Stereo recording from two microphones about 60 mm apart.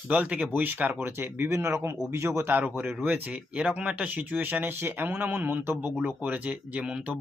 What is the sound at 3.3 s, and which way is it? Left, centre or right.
Speech, centre.